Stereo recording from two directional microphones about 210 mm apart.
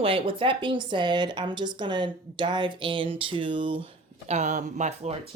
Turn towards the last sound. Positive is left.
turn(degrees=-30)  # may be behind; listen again after turning